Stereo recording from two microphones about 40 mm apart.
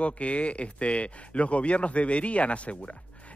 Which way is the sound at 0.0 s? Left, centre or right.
Left.